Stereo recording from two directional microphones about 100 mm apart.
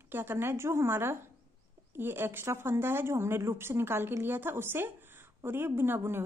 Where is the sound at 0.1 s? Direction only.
20° right (ahead or behind).